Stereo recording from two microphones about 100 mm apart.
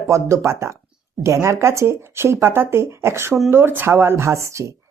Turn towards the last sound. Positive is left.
turn(degrees=-30)  # may be behind; listen again after turning